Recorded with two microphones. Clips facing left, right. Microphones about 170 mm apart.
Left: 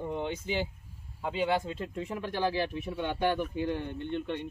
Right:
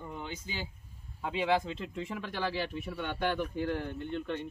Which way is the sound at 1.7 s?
45° left (ahead or behind).